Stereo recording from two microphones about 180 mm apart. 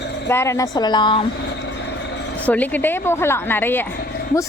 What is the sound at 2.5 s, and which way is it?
A woman's voice, 10° left (ahead or behind).